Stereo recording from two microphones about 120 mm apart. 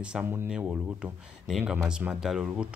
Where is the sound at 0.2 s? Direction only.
20° right (ahead or behind).